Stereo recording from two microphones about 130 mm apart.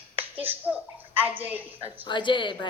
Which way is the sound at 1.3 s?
15° right (ahead or behind).